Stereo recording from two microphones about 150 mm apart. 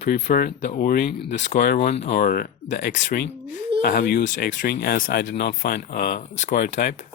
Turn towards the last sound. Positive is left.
turn(degrees=65)  # may be behind; listen again after turning